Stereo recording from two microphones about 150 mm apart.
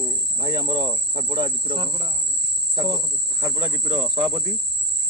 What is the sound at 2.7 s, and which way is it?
Speech, 20° right (ahead or behind).